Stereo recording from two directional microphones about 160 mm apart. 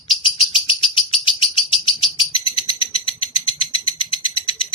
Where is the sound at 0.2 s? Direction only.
35° left (ahead or behind).